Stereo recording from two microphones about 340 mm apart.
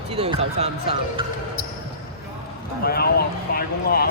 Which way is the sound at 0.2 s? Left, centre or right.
Centre.